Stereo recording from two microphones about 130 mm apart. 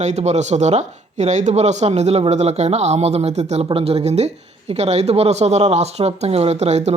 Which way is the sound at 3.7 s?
50° right (ahead or behind).